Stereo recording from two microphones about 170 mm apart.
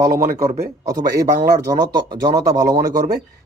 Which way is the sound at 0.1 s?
60° right (ahead or behind).